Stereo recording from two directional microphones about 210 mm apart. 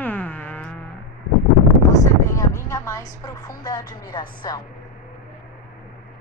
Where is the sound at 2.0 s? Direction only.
15° left (ahead or behind).